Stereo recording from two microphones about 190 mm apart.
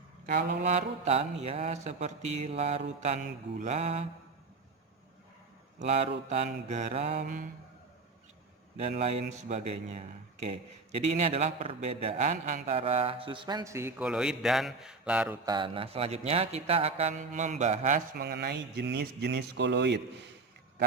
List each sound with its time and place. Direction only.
0.3 s speech: 40° right (ahead or behind)
5.8 s speech: 35° right (ahead or behind)
8.8 s speech: 35° right (ahead or behind); by 14.1 s 15° right (ahead or behind)
14.1 s a man's voice: 5° right (ahead or behind)
15.4 s speech: 25° right (ahead or behind); by 20.2 s 65° right (ahead or behind)